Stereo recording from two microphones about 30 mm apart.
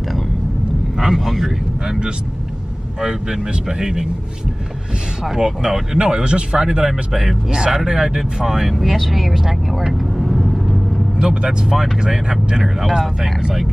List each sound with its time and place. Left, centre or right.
0.9 s vehicle: centre
3.0 s speech: right
5.4 s speech: right
6.9 s speech: centre
7.5 s speech: right
8.7 s speech: centre
9.9 s vehicle: centre
11.1 s speech: right
12.6 s speech: centre